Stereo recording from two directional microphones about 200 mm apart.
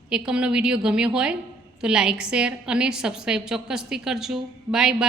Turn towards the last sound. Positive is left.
turn(degrees=-5)  # may be behind; listen again after turning